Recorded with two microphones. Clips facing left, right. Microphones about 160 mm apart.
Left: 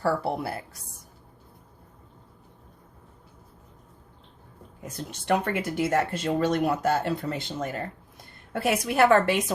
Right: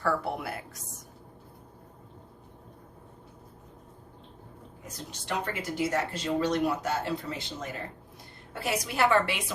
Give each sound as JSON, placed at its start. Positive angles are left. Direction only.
{"t": 0.0, "sound": "a woman's voice", "side_deg": 35}
{"t": 5.3, "sound": "a woman's voice", "side_deg": 55}